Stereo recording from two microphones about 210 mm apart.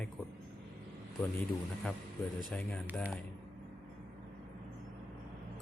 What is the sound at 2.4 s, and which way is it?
Speech, 5° left (ahead or behind).